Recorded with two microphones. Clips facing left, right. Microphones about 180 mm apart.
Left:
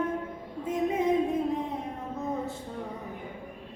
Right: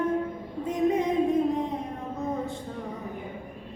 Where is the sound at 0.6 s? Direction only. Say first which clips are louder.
Right 3 dB; 5° left (ahead or behind).